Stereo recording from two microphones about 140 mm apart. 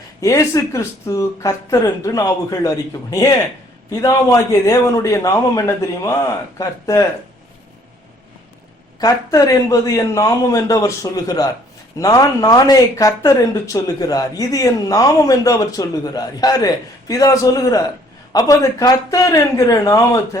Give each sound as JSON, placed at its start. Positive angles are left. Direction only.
{"t": 0.2, "sound": "speech", "side_deg": 25}
{"t": 9.0, "sound": "speech", "side_deg": 25}